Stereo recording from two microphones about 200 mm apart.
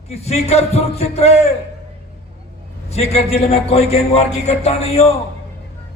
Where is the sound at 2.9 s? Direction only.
30° left (ahead or behind).